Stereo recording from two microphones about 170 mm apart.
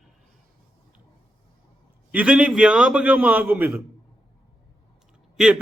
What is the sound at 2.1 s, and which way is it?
A man's voice, 5° right (ahead or behind).